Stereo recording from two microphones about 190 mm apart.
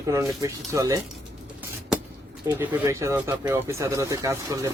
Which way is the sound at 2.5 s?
10° right (ahead or behind).